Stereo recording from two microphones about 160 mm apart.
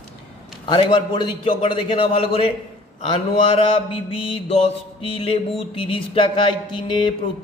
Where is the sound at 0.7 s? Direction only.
30° left (ahead or behind).